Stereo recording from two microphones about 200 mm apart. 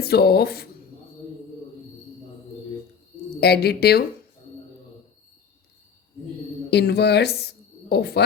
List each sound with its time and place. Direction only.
0.0 s speech: 50° left (ahead or behind)
3.4 s speech: 55° left (ahead or behind)
6.7 s speech: 55° left (ahead or behind)